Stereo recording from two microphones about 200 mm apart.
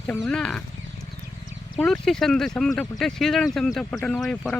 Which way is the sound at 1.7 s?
Centre (ahead or behind).